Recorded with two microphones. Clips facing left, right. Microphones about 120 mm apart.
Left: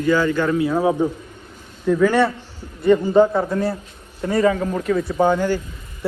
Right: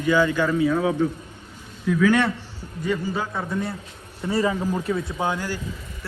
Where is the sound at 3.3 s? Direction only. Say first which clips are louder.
Left 7 dB; centre (ahead or behind).